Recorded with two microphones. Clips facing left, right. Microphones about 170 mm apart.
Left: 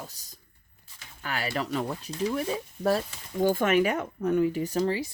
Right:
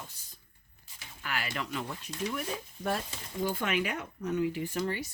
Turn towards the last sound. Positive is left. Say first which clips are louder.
# left 6 dB
turn(degrees=40)  # may be behind; listen again after turning